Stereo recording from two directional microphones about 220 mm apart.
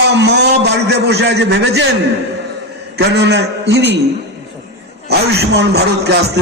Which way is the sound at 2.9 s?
50° right (ahead or behind).